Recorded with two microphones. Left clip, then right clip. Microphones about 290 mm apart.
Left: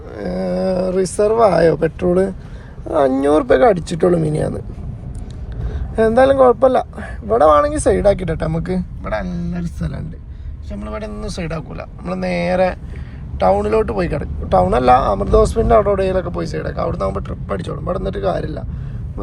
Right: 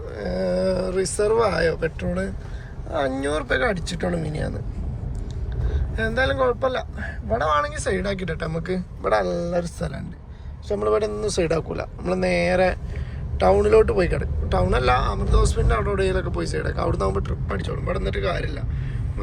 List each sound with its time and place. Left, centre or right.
0.1 s a sound: centre
3.3 s speech: centre
5.6 s a man's voice: centre
9.0 s speech: centre